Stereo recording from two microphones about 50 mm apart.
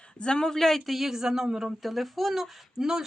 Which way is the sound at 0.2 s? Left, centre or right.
Centre.